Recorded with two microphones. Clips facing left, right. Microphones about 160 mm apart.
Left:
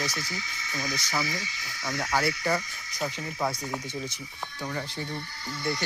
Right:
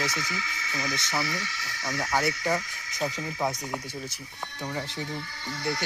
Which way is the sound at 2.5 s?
5° right (ahead or behind).